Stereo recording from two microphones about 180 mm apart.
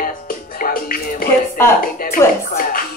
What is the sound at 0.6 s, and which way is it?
Music, 55° left (ahead or behind).